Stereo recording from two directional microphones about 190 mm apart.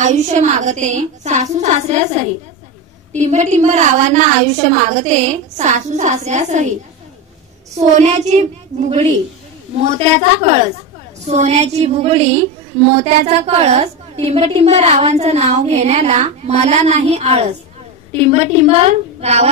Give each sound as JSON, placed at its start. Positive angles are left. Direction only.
{"t": 0.0, "sound": "a woman's voice", "side_deg": -40}
{"t": 3.2, "sound": "a woman's voice", "side_deg": -40}
{"t": 7.9, "sound": "a woman's voice", "side_deg": -35}
{"t": 9.8, "sound": "a woman's voice", "side_deg": -35}